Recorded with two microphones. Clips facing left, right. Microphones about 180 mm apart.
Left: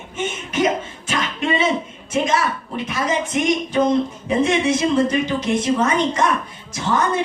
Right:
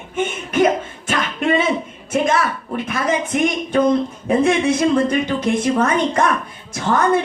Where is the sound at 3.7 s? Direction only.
55° right (ahead or behind).